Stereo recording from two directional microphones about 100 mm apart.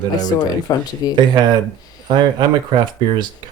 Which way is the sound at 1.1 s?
45° right (ahead or behind).